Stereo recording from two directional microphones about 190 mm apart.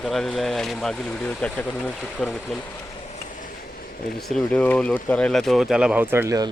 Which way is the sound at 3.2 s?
50° left (ahead or behind).